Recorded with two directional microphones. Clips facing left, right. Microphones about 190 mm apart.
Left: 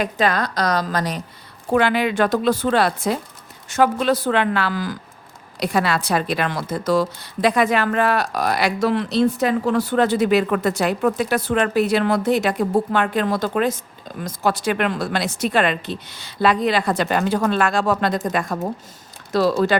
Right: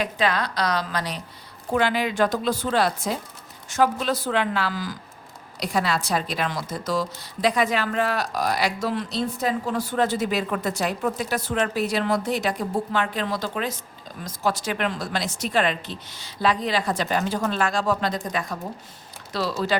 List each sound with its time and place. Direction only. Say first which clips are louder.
0.0 s a woman's voice: left 4 dB; 45° left (ahead or behind)
1.7 s speech: left 5 dB; 65° left (ahead or behind)
18.2 s a woman's voice: left 6 dB; 50° left (ahead or behind)